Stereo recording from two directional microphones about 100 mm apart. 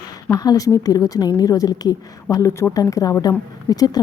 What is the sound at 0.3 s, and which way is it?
Speech, 40° left (ahead or behind).